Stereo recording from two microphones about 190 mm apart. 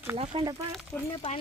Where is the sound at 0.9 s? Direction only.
10° left (ahead or behind).